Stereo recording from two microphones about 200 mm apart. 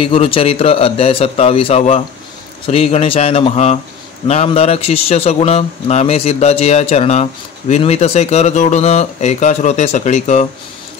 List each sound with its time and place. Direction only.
0.0 s a man's voice: 30° left (ahead or behind)